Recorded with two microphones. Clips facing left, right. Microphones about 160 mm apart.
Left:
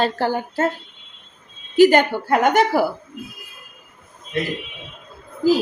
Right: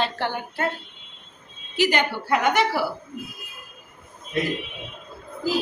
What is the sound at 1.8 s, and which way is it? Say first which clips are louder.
A woman's voice: left 9 dB; 50° left (ahead or behind).